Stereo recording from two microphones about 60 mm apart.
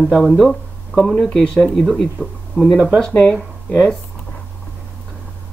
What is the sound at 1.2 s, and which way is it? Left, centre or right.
Speech, centre.